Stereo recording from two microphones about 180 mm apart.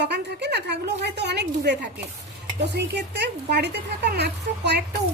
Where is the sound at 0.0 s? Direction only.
70° right (ahead or behind).